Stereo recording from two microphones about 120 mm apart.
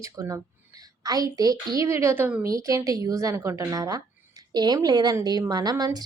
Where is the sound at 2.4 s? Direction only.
30° right (ahead or behind).